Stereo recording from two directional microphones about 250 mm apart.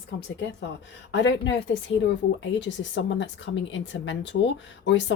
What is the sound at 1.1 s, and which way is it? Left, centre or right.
Speech, left.